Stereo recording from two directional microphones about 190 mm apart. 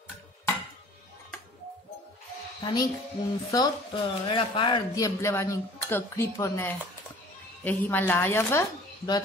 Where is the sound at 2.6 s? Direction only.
25° left (ahead or behind).